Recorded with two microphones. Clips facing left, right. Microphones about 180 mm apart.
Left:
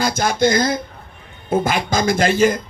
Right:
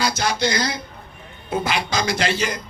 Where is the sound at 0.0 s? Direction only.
50° left (ahead or behind).